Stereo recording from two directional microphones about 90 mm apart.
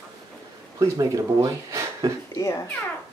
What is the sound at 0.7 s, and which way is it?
Speech, 40° right (ahead or behind).